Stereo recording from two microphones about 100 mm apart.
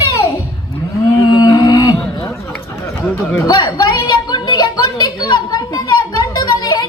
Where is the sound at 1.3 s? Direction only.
40° left (ahead or behind).